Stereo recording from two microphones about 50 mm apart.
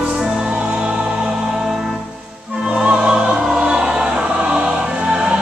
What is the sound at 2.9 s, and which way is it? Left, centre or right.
Music, centre.